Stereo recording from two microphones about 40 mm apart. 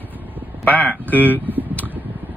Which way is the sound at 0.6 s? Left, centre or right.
Left.